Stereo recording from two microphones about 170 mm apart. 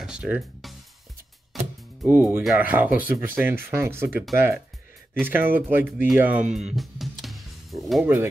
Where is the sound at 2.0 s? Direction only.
10° right (ahead or behind).